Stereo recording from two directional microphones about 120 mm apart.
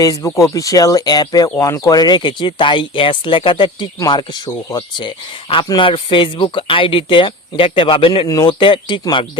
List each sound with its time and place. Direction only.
0.0 s speech: 30° left (ahead or behind)